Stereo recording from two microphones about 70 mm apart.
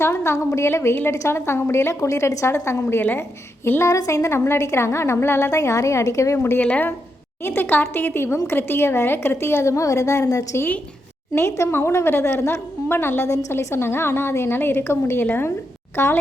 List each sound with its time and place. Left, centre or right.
0.0 s a woman's voice: left
2.9 s a woman's voice: left
3.9 s a woman's voice: left
6.3 s a woman's voice: left
6.6 s a woman's voice: left
11.3 s a woman's voice: left